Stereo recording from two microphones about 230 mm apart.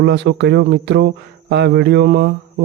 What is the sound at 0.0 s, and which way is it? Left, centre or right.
Speech, right.